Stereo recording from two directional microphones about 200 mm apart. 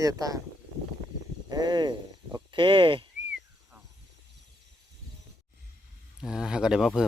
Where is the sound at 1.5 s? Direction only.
20° right (ahead or behind).